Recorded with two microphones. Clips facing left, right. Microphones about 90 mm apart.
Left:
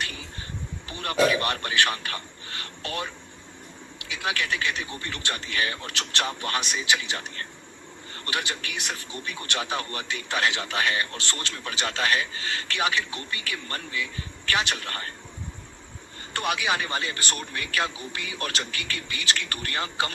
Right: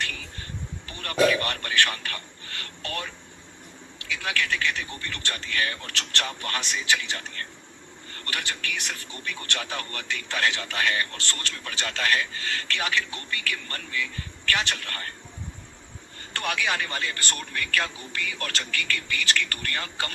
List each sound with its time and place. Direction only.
0.9 s a man's voice: 20° left (ahead or behind)
16.3 s a man's voice: 15° left (ahead or behind)